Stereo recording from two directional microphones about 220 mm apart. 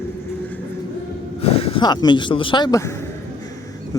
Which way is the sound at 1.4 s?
25° left (ahead or behind).